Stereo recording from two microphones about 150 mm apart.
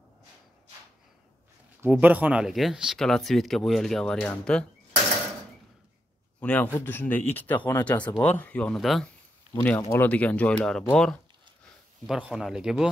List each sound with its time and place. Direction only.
1.8 s speech: 10° right (ahead or behind); by 4.6 s 5° left (ahead or behind)
6.4 s speech: 10° left (ahead or behind)
9.8 s speech: 20° left (ahead or behind)
10.0 s speech: 10° left (ahead or behind)